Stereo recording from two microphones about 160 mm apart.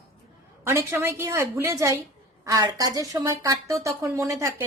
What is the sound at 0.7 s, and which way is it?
A woman's voice, 15° right (ahead or behind).